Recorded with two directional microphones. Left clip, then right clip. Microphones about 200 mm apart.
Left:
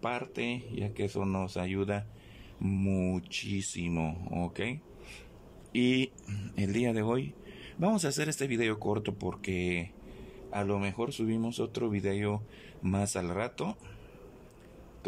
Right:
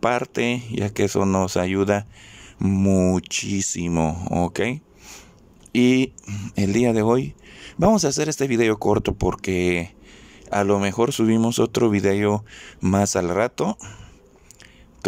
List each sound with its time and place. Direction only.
0.0 s speech: 40° right (ahead or behind)